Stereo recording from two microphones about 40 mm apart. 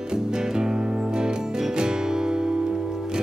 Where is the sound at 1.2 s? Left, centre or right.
Centre.